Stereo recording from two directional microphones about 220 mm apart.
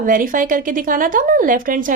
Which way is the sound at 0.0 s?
40° right (ahead or behind).